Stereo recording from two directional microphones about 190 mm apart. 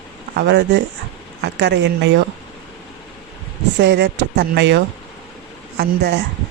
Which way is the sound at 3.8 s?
65° right (ahead or behind).